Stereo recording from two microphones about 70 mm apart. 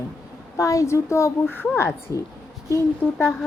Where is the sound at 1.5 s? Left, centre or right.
Left.